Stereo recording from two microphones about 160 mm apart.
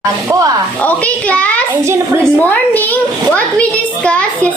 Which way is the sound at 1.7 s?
15° right (ahead or behind).